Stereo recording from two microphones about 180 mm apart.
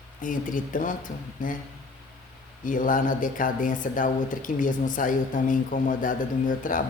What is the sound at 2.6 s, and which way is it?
Speech, 50° left (ahead or behind).